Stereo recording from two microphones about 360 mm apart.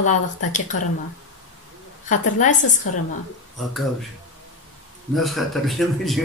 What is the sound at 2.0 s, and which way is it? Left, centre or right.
Speech, left.